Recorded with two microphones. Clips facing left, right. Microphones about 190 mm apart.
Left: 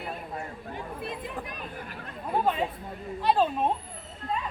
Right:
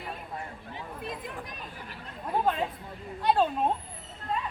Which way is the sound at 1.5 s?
55° left (ahead or behind).